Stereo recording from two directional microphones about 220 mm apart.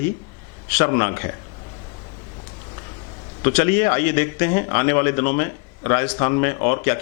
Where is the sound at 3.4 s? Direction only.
10° left (ahead or behind).